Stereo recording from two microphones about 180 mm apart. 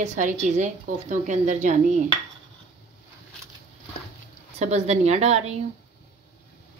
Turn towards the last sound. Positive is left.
turn(degrees=-35)  # may be behind; listen again after turning